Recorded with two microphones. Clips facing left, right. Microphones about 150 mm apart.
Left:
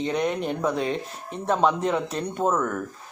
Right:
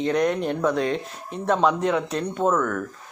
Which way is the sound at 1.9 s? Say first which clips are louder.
Right 2 dB; 30° left (ahead or behind).